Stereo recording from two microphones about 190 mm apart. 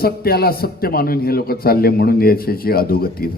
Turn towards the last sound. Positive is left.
turn(degrees=50)  # may be behind; listen again after turning